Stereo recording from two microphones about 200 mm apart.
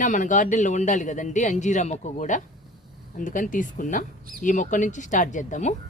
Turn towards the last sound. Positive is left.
turn(degrees=35)  # may be behind; listen again after turning